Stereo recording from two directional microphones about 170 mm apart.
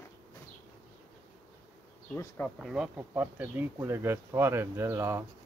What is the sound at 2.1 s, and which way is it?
Bee, 10° left (ahead or behind).